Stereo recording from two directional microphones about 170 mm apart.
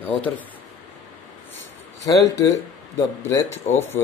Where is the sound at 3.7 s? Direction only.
45° left (ahead or behind).